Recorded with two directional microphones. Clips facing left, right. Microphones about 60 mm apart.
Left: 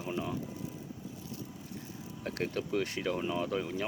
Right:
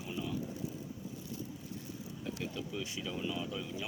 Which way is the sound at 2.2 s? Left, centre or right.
Left.